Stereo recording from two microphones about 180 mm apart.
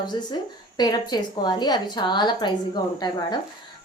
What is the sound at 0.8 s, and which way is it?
Speech, 25° left (ahead or behind).